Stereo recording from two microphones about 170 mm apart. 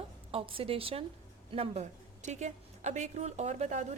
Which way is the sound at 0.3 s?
35° right (ahead or behind).